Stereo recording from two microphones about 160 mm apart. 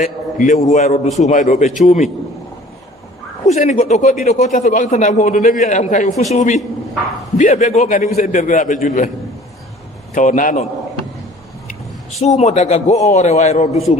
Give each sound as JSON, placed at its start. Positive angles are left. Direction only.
{"t": 0.0, "sound": "speech", "side_deg": 50}
{"t": 3.4, "sound": "speech", "side_deg": 45}
{"t": 10.2, "sound": "speech", "side_deg": 55}
{"t": 12.2, "sound": "speech", "side_deg": 45}